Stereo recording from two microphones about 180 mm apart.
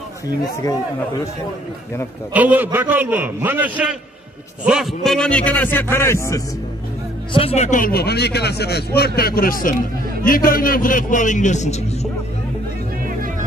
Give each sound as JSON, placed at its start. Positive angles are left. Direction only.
{"t": 2.3, "sound": "a man's voice", "side_deg": -10}
{"t": 7.3, "sound": "speech", "side_deg": 35}